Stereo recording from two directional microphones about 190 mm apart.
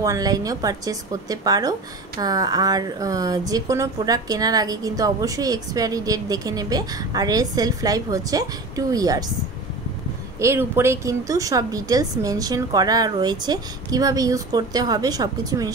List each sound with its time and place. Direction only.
0.0 s a woman's voice: 20° right (ahead or behind)
10.4 s a woman's voice: 15° right (ahead or behind)